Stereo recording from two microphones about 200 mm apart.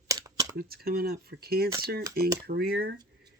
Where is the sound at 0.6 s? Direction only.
50° right (ahead or behind).